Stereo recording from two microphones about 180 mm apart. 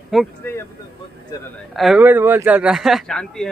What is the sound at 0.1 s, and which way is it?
Speech, centre (ahead or behind).